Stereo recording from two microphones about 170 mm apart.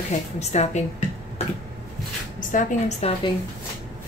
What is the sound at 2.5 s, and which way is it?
Speech, 50° left (ahead or behind).